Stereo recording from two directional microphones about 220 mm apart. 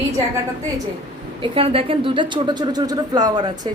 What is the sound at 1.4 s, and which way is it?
Speech, 25° right (ahead or behind).